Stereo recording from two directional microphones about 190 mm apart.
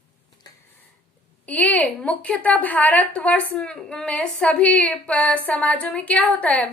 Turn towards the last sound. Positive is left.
turn(degrees=5)  # may be behind; listen again after turning